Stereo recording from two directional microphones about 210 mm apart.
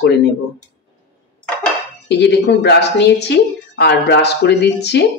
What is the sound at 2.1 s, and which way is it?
Speech, 55° left (ahead or behind).